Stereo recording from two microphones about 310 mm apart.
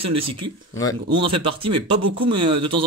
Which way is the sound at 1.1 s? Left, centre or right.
Centre.